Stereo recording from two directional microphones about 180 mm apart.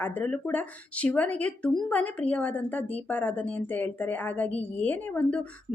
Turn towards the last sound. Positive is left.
turn(degrees=10)  # may be behind; listen again after turning